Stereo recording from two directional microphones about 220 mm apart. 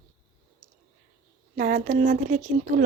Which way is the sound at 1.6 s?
35° right (ahead or behind).